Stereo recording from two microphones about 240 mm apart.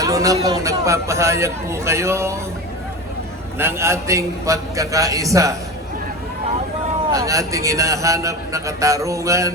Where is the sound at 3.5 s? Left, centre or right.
Centre.